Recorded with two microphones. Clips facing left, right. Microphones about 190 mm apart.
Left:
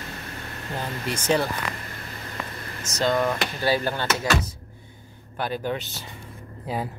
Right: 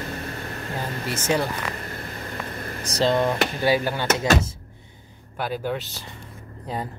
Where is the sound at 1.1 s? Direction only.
10° right (ahead or behind).